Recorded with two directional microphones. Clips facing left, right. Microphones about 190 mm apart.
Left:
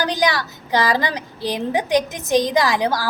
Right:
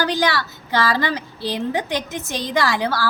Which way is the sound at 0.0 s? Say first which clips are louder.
Even; 15° left (ahead or behind).